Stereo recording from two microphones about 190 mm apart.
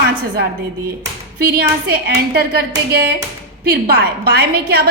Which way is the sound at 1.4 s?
55° right (ahead or behind).